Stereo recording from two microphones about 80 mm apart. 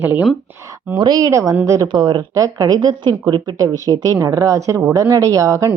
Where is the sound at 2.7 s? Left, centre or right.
Right.